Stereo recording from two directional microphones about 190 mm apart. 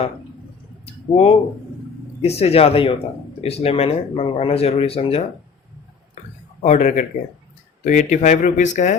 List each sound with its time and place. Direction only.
1.1 s speech: 30° left (ahead or behind)
6.2 s a sound: 35° left (ahead or behind)
6.6 s speech: 40° left (ahead or behind)